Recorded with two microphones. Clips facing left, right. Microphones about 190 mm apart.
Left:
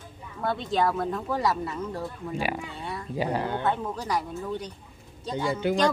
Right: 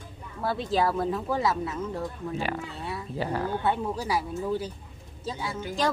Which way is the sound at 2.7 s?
5° right (ahead or behind).